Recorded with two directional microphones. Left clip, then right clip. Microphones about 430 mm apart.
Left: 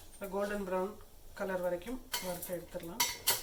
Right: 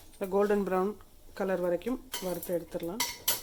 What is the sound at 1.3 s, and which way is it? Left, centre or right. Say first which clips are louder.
Speech: right 5 dB; centre.